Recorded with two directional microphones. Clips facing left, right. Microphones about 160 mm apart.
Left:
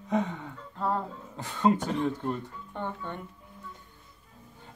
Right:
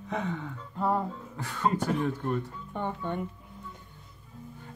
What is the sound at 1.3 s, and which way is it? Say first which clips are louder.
Speech: left 4 dB; 20° left (ahead or behind).